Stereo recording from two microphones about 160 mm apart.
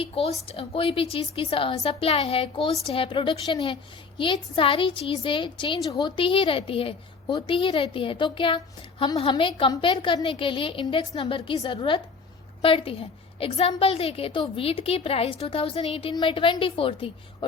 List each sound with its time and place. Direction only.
0.0 s a woman's voice: 40° left (ahead or behind)